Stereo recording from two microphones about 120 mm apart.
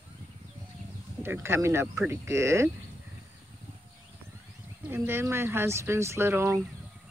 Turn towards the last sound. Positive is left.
turn(degrees=-20)  # may be behind; listen again after turning